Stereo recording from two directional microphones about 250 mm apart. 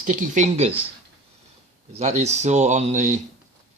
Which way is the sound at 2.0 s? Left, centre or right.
Right.